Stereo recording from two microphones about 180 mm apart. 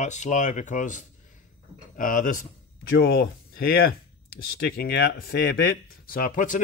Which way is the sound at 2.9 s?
60° left (ahead or behind).